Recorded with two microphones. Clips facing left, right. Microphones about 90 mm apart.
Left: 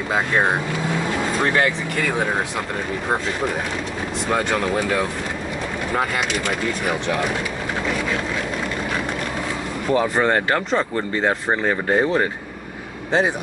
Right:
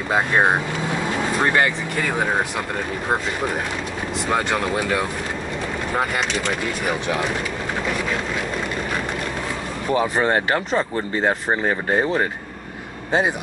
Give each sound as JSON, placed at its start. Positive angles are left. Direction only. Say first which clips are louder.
{"t": 0.3, "sound": "speech", "louder": "right 2 dB", "side_deg": -15}
{"t": 1.6, "sound": "speech", "louder": "even", "side_deg": -5}
{"t": 4.3, "sound": "speech", "louder": "left 1 dB", "side_deg": -5}
{"t": 9.9, "sound": "speech", "louder": "left 1 dB", "side_deg": -10}